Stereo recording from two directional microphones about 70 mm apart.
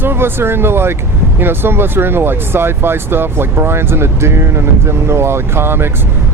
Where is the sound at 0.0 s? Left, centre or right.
Right.